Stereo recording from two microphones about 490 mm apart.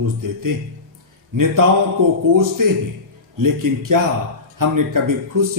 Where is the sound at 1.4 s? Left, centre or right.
Right.